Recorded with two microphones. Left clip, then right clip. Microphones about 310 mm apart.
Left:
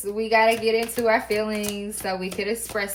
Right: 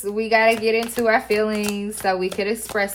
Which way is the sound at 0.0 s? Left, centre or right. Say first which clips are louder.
Right 2 dB; right.